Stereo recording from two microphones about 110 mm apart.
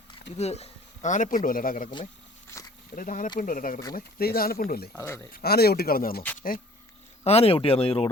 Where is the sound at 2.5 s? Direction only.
25° left (ahead or behind).